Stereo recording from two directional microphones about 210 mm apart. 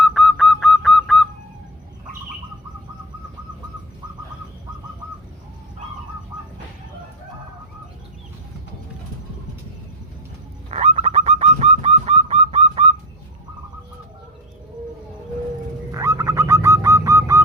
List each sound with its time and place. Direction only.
0.0 s a sound: centre (ahead or behind)
10.7 s bird: 30° right (ahead or behind)
15.9 s bird: 15° right (ahead or behind)